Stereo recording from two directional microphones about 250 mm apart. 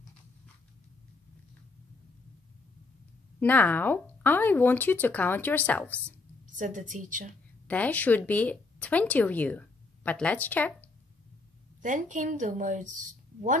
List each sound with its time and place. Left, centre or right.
3.3 s speech: centre
6.6 s a woman's voice: right
7.6 s speech: centre
11.8 s a woman's voice: right